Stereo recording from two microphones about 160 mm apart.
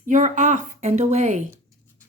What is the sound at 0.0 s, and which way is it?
A woman's voice, 50° right (ahead or behind).